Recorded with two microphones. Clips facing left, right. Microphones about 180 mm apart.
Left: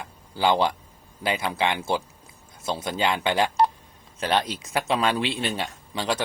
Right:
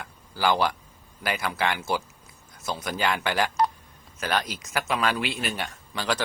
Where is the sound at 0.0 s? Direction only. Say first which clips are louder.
Left 2 dB; 25° left (ahead or behind).